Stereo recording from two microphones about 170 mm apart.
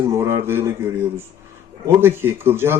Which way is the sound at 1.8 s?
15° right (ahead or behind).